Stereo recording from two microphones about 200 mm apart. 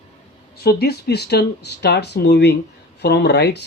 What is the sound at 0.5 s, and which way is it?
Speech, 55° left (ahead or behind).